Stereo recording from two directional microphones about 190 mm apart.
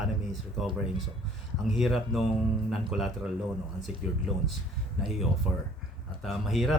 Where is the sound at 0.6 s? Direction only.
Centre (ahead or behind).